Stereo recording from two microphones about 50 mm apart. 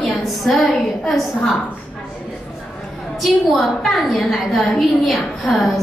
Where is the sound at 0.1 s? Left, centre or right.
Centre.